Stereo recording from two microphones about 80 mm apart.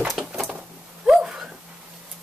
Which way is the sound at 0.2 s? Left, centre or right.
Centre.